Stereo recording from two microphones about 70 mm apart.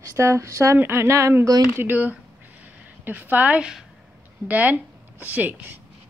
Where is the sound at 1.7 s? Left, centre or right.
Right.